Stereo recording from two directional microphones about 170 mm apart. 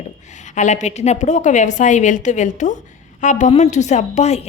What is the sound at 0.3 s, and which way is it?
A woman's voice, 45° left (ahead or behind).